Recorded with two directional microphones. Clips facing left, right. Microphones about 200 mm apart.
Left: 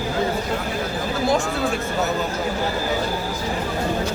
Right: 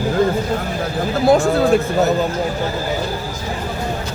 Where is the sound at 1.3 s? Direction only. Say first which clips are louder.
Right 8 dB; 45° right (ahead or behind).